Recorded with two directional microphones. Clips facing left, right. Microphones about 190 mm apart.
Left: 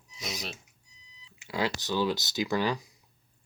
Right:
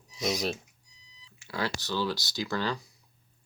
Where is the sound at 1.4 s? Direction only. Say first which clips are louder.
Left 2 dB; 15° left (ahead or behind).